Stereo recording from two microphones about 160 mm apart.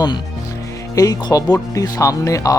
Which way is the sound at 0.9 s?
20° left (ahead or behind).